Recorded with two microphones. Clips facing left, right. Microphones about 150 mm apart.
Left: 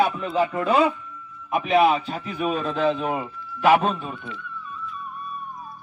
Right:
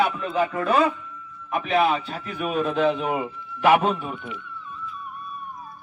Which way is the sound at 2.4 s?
10° right (ahead or behind).